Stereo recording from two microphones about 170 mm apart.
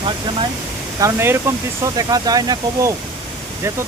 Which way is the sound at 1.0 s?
15° right (ahead or behind).